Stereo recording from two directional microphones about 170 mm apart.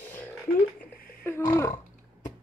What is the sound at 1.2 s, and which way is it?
Roaring cats, 15° left (ahead or behind).